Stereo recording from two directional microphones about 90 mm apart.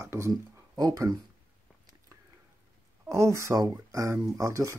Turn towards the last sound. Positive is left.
turn(degrees=-40)  # may be behind; listen again after turning